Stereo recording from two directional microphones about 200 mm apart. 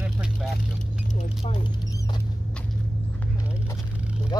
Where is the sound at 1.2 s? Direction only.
30° left (ahead or behind).